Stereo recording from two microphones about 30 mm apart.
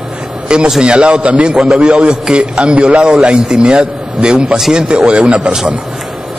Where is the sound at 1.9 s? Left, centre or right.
Right.